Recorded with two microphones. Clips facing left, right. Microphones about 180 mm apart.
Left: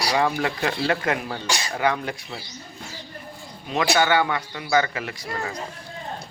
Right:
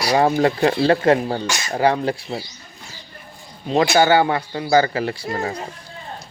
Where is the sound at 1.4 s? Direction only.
35° left (ahead or behind).